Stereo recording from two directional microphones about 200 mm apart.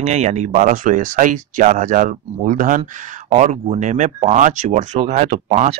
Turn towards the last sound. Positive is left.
turn(degrees=-35)  # may be behind; listen again after turning